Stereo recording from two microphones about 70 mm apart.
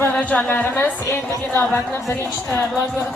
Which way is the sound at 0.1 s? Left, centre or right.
Centre.